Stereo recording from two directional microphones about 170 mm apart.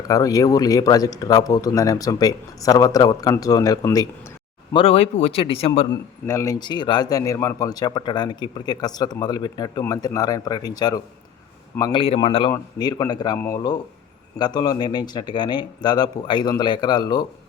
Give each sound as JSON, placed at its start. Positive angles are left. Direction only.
{"t": 0.1, "sound": "speech", "side_deg": 20}
{"t": 4.9, "sound": "speech", "side_deg": 40}
{"t": 5.9, "sound": "speech", "side_deg": 15}